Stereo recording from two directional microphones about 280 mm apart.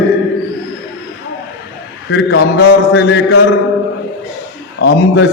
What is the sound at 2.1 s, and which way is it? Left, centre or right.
A man's voice, left.